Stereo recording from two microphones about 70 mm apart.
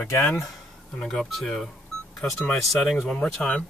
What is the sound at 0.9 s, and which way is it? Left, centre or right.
Speech, centre.